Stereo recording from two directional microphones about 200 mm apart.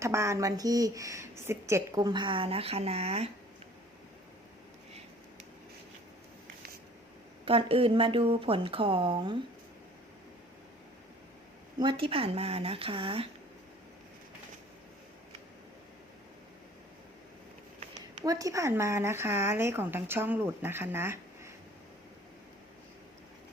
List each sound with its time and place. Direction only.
0.0 s a woman's voice: 15° right (ahead or behind); by 3.2 s 30° right (ahead or behind)
7.4 s a woman's voice: 25° right (ahead or behind)
11.8 s a woman's voice: 25° right (ahead or behind)
17.9 s speech: 20° right (ahead or behind)